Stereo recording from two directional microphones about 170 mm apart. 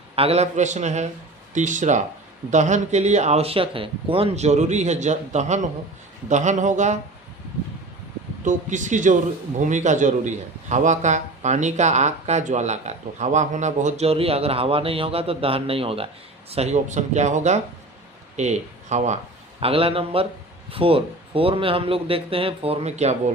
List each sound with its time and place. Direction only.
0.2 s a man's voice: 40° right (ahead or behind)
8.4 s a man's voice: 45° right (ahead or behind)